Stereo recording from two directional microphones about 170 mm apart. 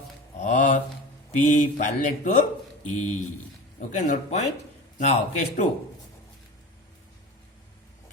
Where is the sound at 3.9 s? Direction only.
45° left (ahead or behind).